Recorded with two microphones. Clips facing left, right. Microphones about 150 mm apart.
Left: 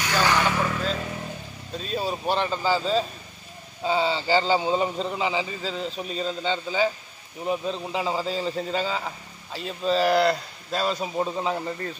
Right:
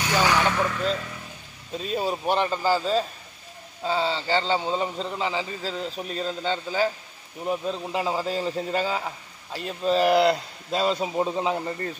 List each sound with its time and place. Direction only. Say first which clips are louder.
0.1 s vehicle: right 1 dB; 5° right (ahead or behind)
1.8 s a man's voice: right 2 dB; 10° right (ahead or behind)
3.8 s a man's voice: left 2 dB; 5° left (ahead or behind); by 11.0 s 20° right (ahead or behind)
11.0 s a man's voice: right 2 dB; 10° right (ahead or behind)